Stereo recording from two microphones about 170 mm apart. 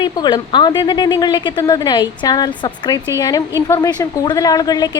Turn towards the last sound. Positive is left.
turn(degrees=25)  # may be behind; listen again after turning